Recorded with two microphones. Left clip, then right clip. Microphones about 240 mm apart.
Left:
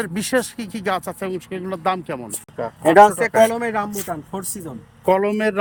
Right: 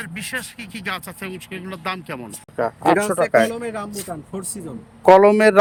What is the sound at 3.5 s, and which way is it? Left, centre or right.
Speech, centre.